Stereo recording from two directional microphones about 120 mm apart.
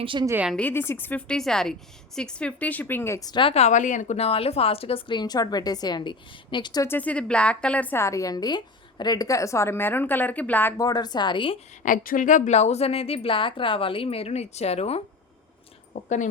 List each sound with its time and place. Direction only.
0.0 s a woman's voice: 45° right (ahead or behind)
0.5 s a woman's voice: 15° left (ahead or behind)
1.4 s a woman's voice: 5° left (ahead or behind); by 3.3 s 25° left (ahead or behind)
3.5 s a woman's voice: 75° left (ahead or behind); by 6.8 s 40° left (ahead or behind)
6.8 s a woman's voice: 15° left (ahead or behind)
10.8 s a woman's voice: 35° left (ahead or behind)
11.8 s speech: 90° left; by 15.0 s 60° left (ahead or behind)
15.9 s speech: 90° left